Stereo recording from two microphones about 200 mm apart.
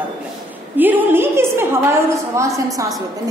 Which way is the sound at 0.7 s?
10° right (ahead or behind).